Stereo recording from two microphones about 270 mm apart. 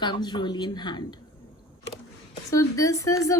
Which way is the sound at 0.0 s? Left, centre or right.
Centre.